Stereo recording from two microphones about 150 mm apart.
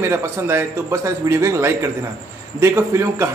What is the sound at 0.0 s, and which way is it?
A man's voice, 15° right (ahead or behind).